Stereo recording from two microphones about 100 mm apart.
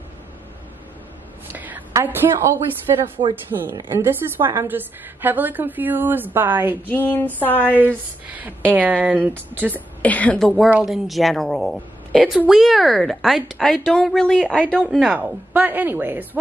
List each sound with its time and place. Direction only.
1.5 s a sound: 15° right (ahead or behind)
2.0 s a woman's voice: 25° right (ahead or behind)
6.9 s a sound: 20° left (ahead or behind)
7.7 s a woman's voice: 15° right (ahead or behind)
10.0 s a woman's voice: 15° left (ahead or behind)
10.4 s a woman's voice: centre (ahead or behind)
14.9 s a woman's voice: centre (ahead or behind)
15.1 s a woman's voice: 15° right (ahead or behind)